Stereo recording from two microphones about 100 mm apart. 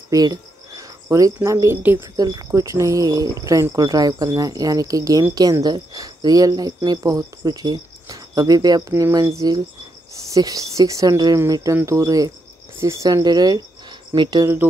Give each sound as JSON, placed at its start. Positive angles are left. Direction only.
{"t": 0.1, "sound": "a sound", "side_deg": -40}
{"t": 1.0, "sound": "speech", "side_deg": -30}
{"t": 14.4, "sound": "speech", "side_deg": -25}